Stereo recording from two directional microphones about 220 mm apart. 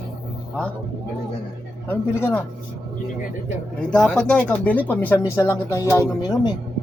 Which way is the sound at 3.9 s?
5° left (ahead or behind).